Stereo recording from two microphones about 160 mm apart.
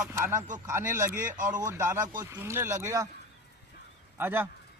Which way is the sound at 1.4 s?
55° right (ahead or behind).